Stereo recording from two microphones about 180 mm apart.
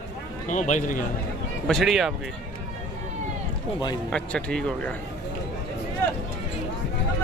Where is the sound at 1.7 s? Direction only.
Centre (ahead or behind).